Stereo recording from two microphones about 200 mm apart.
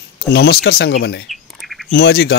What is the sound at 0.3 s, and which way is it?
Speech, 55° left (ahead or behind).